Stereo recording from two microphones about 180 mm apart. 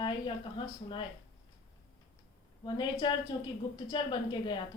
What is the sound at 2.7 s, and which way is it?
A woman's voice, 25° left (ahead or behind).